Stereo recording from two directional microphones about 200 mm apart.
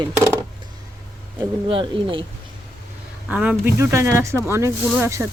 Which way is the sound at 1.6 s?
25° right (ahead or behind).